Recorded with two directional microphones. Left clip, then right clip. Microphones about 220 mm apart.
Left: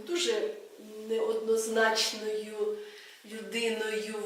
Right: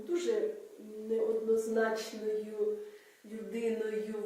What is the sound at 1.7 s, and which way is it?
Speech, 5° right (ahead or behind).